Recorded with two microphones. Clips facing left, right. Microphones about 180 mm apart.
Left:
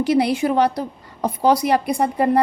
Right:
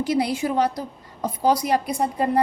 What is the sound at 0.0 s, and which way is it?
A woman's voice, 65° left (ahead or behind).